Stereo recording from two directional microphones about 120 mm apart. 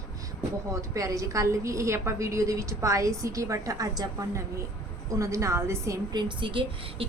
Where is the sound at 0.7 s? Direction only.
25° right (ahead or behind).